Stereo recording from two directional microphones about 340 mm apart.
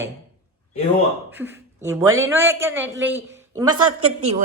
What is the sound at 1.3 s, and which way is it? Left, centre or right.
A man's voice, centre.